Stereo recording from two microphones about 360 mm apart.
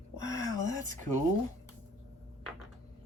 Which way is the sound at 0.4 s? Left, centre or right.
Centre.